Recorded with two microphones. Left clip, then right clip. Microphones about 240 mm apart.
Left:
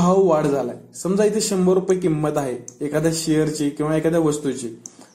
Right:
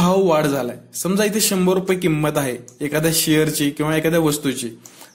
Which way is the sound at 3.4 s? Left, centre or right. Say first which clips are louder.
Right 2 dB; right.